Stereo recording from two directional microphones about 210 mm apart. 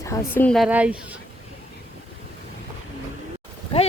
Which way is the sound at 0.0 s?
15° left (ahead or behind).